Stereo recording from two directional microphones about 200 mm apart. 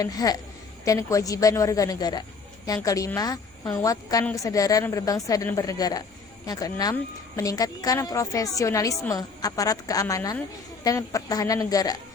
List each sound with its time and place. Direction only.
0.0 s a woman's voice: 20° left (ahead or behind)